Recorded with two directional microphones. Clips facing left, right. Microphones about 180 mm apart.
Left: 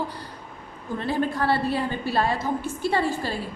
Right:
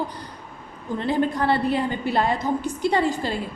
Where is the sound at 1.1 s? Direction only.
20° right (ahead or behind).